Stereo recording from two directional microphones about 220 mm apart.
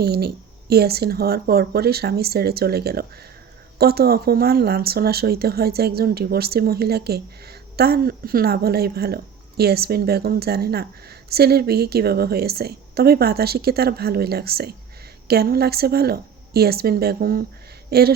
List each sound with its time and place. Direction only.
0.0 s a woman's voice: 45° right (ahead or behind)